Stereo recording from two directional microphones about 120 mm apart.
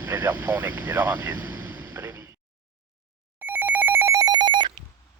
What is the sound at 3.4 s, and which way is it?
Telephone bell ringing, 15° right (ahead or behind).